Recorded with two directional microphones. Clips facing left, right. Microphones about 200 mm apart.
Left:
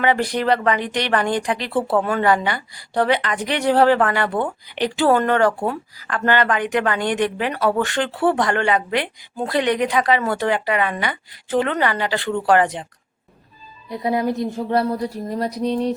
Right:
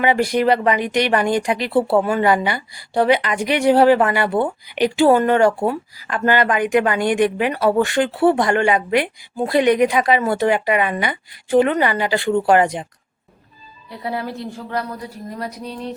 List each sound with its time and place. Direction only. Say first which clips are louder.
0.0 s speech: right 3 dB; 10° right (ahead or behind)
13.9 s speech: left 5 dB; 15° left (ahead or behind)
14.7 s speech: left 6 dB; 30° left (ahead or behind)